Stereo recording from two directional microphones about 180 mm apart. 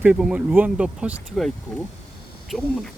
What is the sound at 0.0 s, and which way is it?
Speech, 5° right (ahead or behind).